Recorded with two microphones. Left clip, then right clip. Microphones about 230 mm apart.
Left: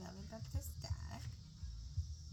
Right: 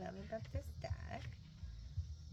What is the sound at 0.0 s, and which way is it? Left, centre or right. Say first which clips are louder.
Cricket: right 7 dB; centre.